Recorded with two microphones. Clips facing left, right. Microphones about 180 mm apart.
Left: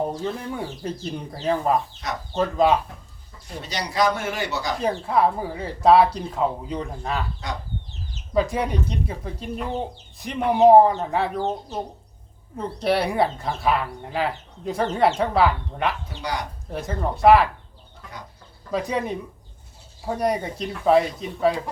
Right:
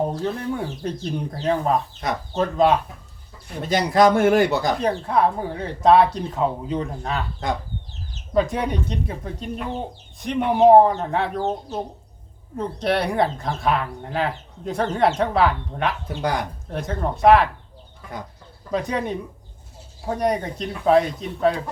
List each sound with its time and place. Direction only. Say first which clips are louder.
0.2 s speech: right 3 dB; centre (ahead or behind)
3.6 s speech: right 7 dB; 50° right (ahead or behind)
4.8 s speech: right 1 dB; centre (ahead or behind)
8.3 s speech: right 1 dB; centre (ahead or behind)
12.5 s speech: even; centre (ahead or behind)
16.0 s speech: right 5 dB; 50° right (ahead or behind)
16.6 s speech: left 2 dB; centre (ahead or behind)
18.7 s speech: right 1 dB; centre (ahead or behind)